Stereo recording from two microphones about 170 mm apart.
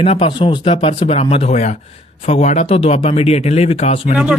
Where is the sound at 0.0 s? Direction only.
35° left (ahead or behind).